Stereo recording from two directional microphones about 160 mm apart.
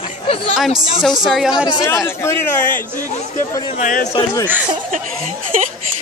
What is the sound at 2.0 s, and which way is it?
Speech, 15° left (ahead or behind).